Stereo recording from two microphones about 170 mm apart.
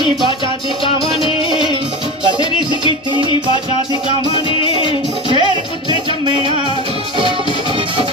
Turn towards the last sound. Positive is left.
turn(degrees=-30)  # may be behind; listen again after turning